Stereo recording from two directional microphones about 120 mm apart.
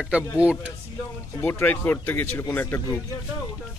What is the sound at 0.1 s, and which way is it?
Speech, 10° right (ahead or behind).